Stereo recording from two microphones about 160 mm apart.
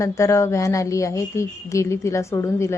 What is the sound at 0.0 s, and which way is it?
Speech, 20° left (ahead or behind).